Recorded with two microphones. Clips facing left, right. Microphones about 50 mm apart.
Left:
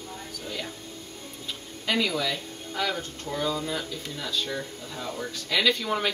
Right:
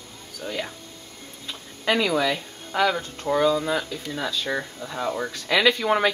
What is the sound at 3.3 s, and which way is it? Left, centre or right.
Speech, right.